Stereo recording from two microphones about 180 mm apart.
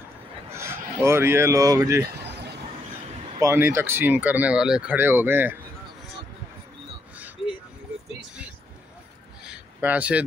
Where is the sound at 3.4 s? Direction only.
15° right (ahead or behind).